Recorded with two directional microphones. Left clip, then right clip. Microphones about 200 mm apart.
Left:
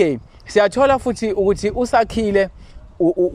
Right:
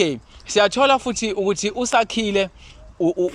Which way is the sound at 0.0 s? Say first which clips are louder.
Left 4 dB; 5° left (ahead or behind).